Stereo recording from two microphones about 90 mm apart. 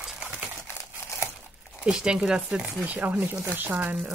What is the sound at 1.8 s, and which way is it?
Speech, 10° right (ahead or behind).